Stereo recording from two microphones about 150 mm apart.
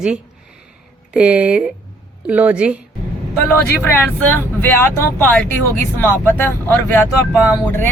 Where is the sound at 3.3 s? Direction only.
15° left (ahead or behind).